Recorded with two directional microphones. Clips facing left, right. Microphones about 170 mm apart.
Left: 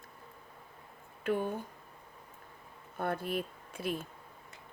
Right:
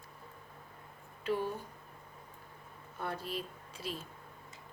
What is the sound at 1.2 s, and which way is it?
Speech, 55° left (ahead or behind).